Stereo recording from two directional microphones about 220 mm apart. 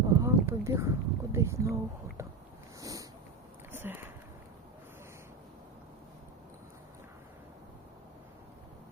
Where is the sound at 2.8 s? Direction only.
15° right (ahead or behind).